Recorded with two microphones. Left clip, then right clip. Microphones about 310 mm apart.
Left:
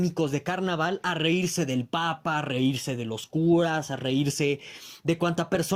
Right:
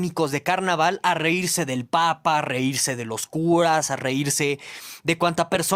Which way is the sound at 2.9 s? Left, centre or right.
Right.